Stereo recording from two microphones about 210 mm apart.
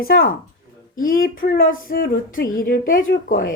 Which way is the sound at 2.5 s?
45° left (ahead or behind).